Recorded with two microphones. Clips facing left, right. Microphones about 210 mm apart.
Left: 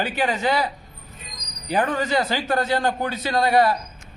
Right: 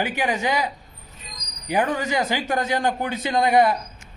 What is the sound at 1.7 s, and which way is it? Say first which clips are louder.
A man's voice: left 1 dB; 15° right (ahead or behind).